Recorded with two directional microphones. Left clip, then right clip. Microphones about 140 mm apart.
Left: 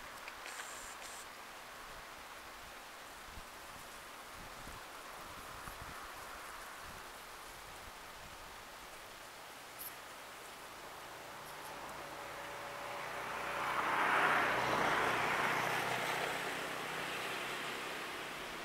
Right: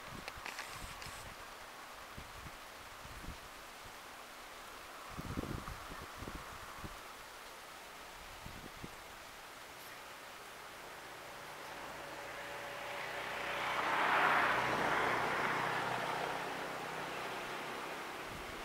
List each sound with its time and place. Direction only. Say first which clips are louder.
12.9 s vehicle: right 1 dB; 25° right (ahead or behind)
15.0 s vehicle: even; 15° left (ahead or behind)